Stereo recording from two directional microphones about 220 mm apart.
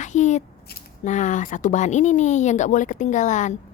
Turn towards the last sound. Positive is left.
turn(degrees=35)  # may be behind; listen again after turning